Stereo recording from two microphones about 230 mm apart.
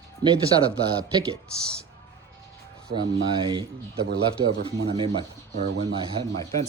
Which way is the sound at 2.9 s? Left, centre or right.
Centre.